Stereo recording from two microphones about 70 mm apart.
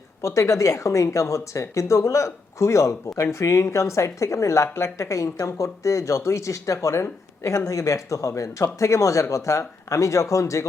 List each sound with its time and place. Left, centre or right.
0.2 s speech: left